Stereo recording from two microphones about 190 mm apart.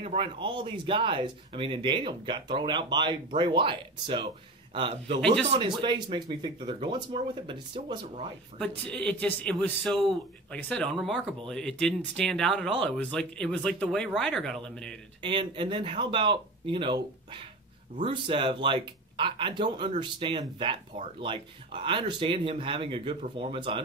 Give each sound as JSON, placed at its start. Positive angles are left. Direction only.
{"t": 0.0, "sound": "speech", "side_deg": -30}
{"t": 8.5, "sound": "a man's voice", "side_deg": 5}
{"t": 15.2, "sound": "speech", "side_deg": -25}